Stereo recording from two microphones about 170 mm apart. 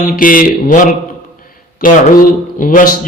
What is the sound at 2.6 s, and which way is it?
Speech, 55° left (ahead or behind).